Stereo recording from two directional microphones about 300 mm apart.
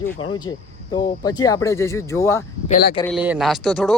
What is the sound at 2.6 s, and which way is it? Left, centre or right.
Speech, left.